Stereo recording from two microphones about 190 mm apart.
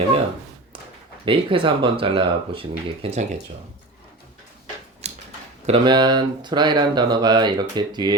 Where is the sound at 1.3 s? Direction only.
25° right (ahead or behind).